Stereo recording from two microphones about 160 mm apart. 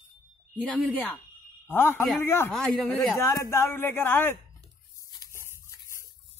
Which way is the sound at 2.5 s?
Centre (ahead or behind).